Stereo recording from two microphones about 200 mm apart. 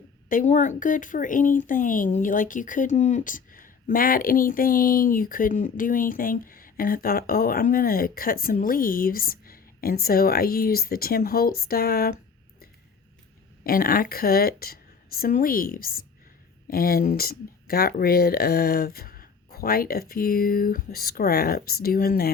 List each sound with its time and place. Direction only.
0.3 s speech: 40° left (ahead or behind)
13.7 s speech: 45° left (ahead or behind)